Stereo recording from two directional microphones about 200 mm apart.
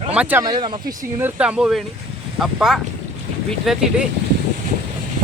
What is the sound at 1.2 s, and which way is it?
Speech, 5° right (ahead or behind).